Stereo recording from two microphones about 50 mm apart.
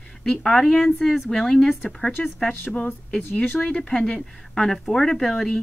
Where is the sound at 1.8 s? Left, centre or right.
Centre.